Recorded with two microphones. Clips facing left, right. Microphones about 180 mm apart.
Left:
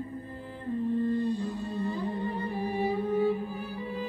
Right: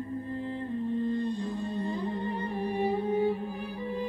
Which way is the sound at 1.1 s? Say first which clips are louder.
Left 1 dB; 10° left (ahead or behind).